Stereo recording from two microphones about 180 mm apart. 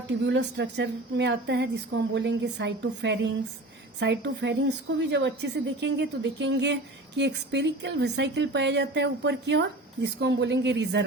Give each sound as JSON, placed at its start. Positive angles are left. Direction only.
{"t": 0.1, "sound": "a woman's voice", "side_deg": -75}